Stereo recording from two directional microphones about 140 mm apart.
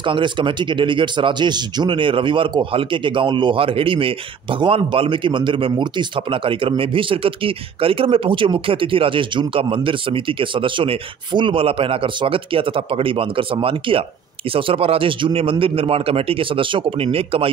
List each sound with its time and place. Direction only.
0.0 s speech: 35° right (ahead or behind)